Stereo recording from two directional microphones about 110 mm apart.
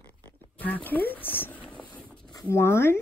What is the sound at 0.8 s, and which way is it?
Speech, 15° left (ahead or behind).